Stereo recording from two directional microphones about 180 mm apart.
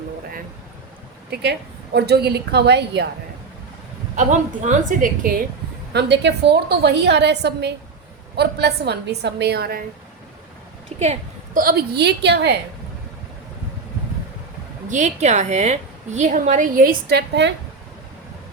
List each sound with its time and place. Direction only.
1.3 s a woman's voice: 65° right (ahead or behind)
4.1 s a woman's voice: 40° right (ahead or behind)
5.9 s a woman's voice: 70° right (ahead or behind)
11.0 s a woman's voice: 45° right (ahead or behind); by 12.5 s 70° right (ahead or behind)
14.8 s a woman's voice: 40° right (ahead or behind); by 17.5 s 70° right (ahead or behind)